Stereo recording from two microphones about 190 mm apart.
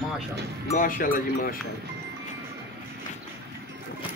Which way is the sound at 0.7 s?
45° left (ahead or behind).